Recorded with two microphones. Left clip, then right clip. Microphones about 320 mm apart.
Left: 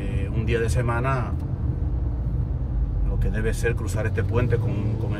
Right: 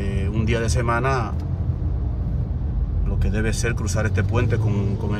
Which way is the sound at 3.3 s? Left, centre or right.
Centre.